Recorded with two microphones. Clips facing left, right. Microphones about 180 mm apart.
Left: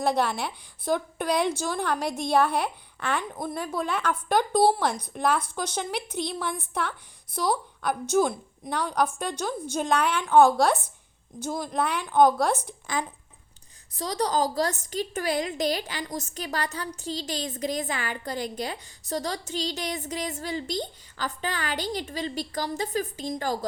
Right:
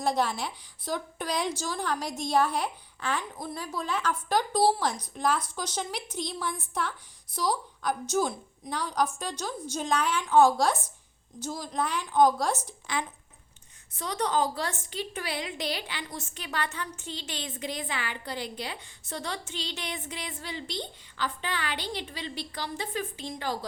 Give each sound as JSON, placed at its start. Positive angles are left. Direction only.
{"t": 0.0, "sound": "a woman's voice", "side_deg": 60}
{"t": 13.9, "sound": "a woman's voice", "side_deg": 35}